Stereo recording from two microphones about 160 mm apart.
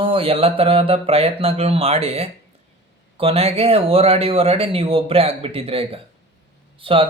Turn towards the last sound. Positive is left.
turn(degrees=-35)  # may be behind; listen again after turning